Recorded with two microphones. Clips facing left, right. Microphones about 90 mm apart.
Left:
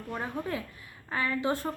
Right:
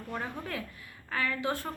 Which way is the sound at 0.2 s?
25° left (ahead or behind).